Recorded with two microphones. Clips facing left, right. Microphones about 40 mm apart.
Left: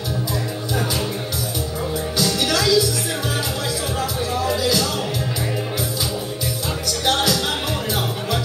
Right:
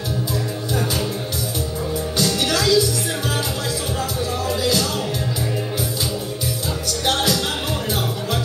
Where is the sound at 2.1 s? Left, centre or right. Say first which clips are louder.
Even; centre.